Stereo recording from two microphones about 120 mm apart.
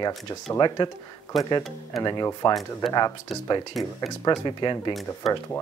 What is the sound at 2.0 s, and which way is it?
Speech, 35° left (ahead or behind).